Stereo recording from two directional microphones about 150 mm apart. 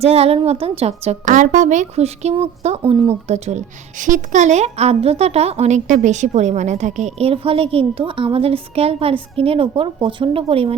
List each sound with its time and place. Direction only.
0.0 s a woman's voice: 40° right (ahead or behind)
1.2 s a woman's voice: 55° right (ahead or behind); by 10.8 s 40° right (ahead or behind)